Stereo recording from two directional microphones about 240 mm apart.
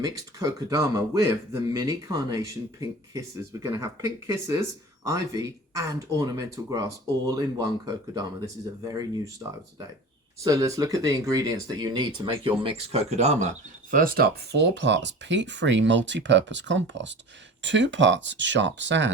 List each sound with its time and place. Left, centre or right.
0.0 s a man's voice: centre
10.4 s speech: centre; by 19.1 s right